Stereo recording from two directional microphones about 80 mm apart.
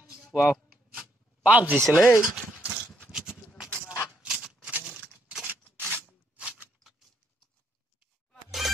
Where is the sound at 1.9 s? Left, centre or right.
Left.